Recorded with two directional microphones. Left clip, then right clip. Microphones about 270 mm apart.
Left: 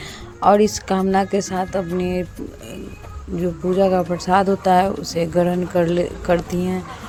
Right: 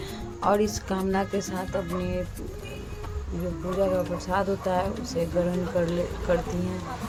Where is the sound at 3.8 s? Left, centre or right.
Left.